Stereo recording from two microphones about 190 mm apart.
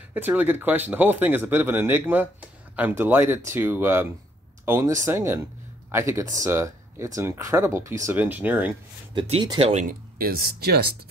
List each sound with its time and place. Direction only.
0.1 s speech: 10° right (ahead or behind)
9.1 s speech: 25° right (ahead or behind)
9.8 s speech: 50° right (ahead or behind)